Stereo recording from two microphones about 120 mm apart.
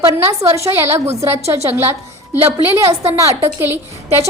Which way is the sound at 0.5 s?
25° right (ahead or behind).